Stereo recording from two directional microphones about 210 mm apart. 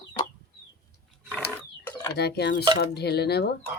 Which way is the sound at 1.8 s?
15° left (ahead or behind).